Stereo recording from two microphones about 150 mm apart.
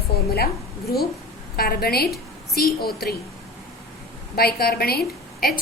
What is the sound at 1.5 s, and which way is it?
A woman's voice, 90° left.